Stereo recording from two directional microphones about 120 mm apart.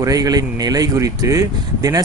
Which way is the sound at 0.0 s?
30° right (ahead or behind).